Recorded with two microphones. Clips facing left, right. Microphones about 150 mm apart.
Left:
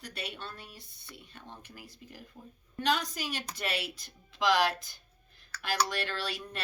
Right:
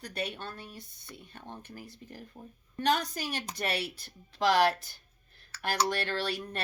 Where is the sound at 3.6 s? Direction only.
45° right (ahead or behind).